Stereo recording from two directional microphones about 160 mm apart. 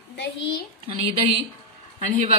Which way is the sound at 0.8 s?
35° right (ahead or behind).